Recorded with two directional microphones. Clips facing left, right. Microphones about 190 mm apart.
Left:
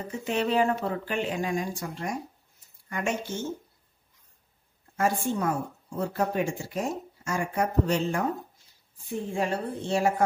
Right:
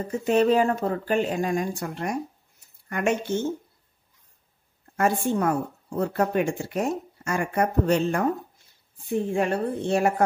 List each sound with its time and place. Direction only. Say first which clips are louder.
0.2 s speech: right 5 dB; 45° right (ahead or behind); by 3.3 s 60° right (ahead or behind)
4.9 s speech: right 3 dB; 60° right (ahead or behind)
9.3 s speech: right 2 dB; 60° right (ahead or behind)